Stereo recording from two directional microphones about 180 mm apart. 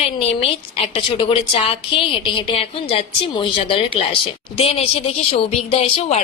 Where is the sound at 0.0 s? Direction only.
30° left (ahead or behind).